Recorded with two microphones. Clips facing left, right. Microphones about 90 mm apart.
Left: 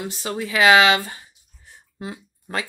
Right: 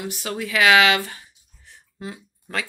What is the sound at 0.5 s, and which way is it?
Speech, 10° left (ahead or behind).